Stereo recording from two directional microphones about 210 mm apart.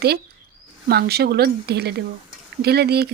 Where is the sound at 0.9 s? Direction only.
50° right (ahead or behind).